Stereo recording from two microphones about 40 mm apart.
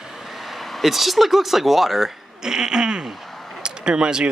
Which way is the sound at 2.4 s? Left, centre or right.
Centre.